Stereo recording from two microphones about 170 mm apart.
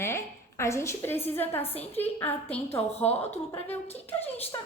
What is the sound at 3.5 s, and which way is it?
Speech, 10° left (ahead or behind).